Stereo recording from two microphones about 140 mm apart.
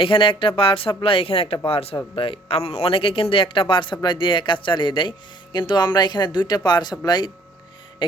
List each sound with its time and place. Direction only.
0.0 s speech: 40° left (ahead or behind)